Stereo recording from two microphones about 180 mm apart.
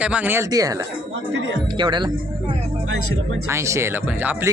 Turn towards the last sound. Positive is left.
turn(degrees=-10)  # may be behind; listen again after turning